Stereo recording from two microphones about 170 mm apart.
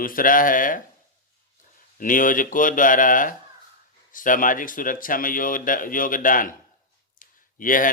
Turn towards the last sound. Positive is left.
turn(degrees=55)  # may be behind; listen again after turning